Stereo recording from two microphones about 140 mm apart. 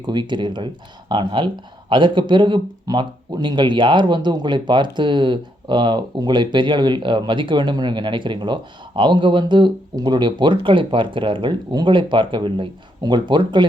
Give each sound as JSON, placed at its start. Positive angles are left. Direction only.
{"t": 0.0, "sound": "speech", "side_deg": -35}